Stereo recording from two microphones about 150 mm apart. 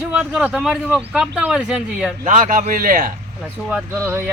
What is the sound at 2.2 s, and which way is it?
Speech, 55° right (ahead or behind).